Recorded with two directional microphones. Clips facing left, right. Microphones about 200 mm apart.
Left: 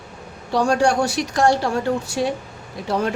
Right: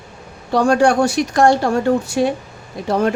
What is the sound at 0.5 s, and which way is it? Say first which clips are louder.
A woman's voice: right 4 dB; 55° right (ahead or behind).